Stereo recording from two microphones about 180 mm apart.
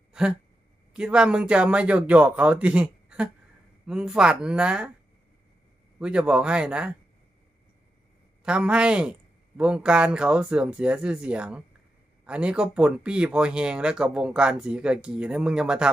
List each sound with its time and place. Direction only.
0.1 s a sound: 5° right (ahead or behind)
0.9 s speech: 5° right (ahead or behind)
6.0 s speech: 5° right (ahead or behind)
8.4 s speech: 5° right (ahead or behind)